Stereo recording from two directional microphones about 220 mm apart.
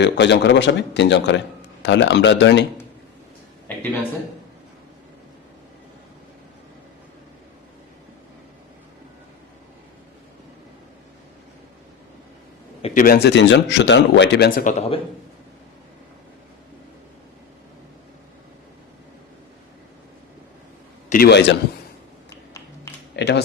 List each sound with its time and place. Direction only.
0.0 s speech: 50° left (ahead or behind)
12.8 s speech: 35° left (ahead or behind)
21.1 s speech: 45° left (ahead or behind)
23.1 s speech: 50° left (ahead or behind)